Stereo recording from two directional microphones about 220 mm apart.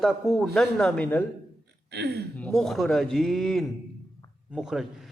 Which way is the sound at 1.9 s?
50° right (ahead or behind).